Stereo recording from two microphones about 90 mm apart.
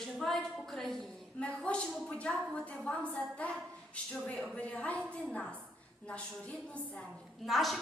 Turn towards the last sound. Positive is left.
turn(degrees=0)  # may be behind; listen again after turning